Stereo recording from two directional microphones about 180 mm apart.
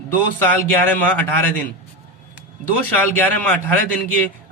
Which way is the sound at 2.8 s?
10° left (ahead or behind).